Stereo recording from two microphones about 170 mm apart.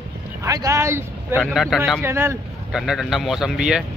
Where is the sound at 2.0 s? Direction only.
15° right (ahead or behind).